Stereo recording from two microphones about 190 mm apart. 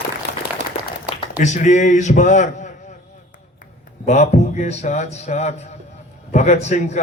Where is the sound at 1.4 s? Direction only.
40° left (ahead or behind).